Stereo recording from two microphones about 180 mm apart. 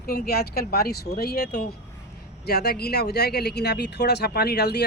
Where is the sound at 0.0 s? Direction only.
60° left (ahead or behind).